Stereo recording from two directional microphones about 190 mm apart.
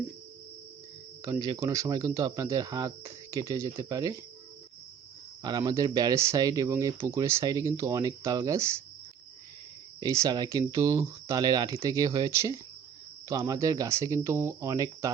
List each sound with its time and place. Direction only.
1.2 s speech: 20° right (ahead or behind)
5.4 s speech: 20° right (ahead or behind)
10.0 s speech: 20° right (ahead or behind)